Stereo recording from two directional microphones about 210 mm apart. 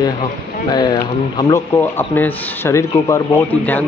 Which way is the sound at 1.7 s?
10° left (ahead or behind).